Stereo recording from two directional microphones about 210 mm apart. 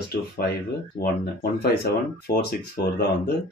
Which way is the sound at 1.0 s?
45° left (ahead or behind).